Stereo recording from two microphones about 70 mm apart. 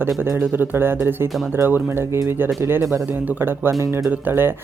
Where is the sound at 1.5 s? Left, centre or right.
Right.